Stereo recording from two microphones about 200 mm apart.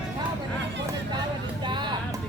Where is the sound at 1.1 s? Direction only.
20° right (ahead or behind).